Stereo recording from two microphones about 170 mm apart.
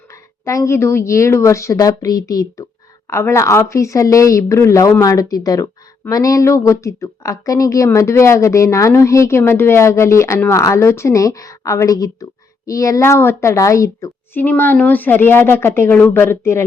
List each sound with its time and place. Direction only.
0.1 s a woman's voice: 20° left (ahead or behind)